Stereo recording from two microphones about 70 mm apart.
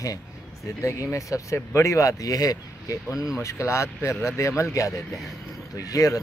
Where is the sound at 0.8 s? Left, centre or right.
Left.